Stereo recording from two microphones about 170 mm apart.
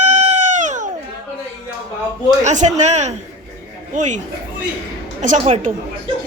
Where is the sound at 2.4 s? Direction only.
45° right (ahead or behind).